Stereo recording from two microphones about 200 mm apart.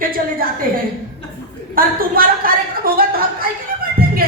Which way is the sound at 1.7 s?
45° right (ahead or behind).